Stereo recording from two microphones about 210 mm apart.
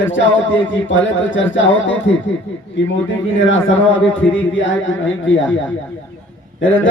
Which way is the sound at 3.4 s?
65° left (ahead or behind).